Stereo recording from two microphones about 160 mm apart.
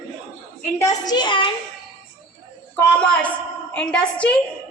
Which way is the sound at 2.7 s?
10° left (ahead or behind).